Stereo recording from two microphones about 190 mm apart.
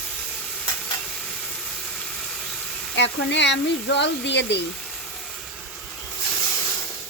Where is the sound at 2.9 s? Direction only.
70° left (ahead or behind).